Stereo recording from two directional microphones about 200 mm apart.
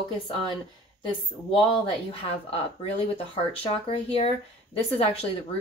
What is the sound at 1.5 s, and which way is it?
Speech, 30° left (ahead or behind).